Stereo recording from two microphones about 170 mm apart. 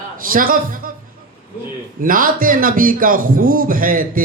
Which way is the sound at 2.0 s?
55° right (ahead or behind).